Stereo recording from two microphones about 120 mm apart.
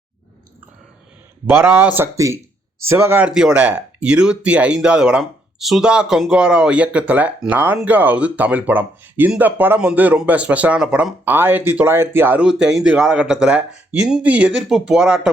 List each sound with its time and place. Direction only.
1.5 s speech: 15° right (ahead or behind)
2.1 s speech: 25° right (ahead or behind)
3.2 s speech: 5° right (ahead or behind)
12.5 s speech: 5° right (ahead or behind)